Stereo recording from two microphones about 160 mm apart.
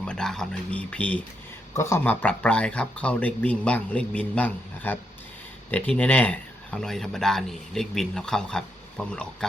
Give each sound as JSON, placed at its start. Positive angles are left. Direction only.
{"t": 0.0, "sound": "speech", "side_deg": 5}